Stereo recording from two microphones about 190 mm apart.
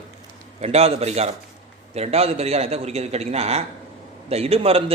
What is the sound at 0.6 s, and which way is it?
Speech, 35° right (ahead or behind).